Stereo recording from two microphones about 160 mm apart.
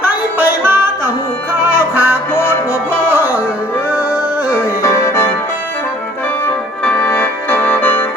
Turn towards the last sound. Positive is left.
turn(degrees=10)  # may be behind; listen again after turning